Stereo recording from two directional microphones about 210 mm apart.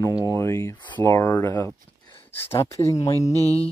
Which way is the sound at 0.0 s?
15° left (ahead or behind).